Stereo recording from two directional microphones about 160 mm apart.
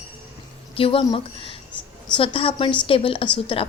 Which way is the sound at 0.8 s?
35° left (ahead or behind).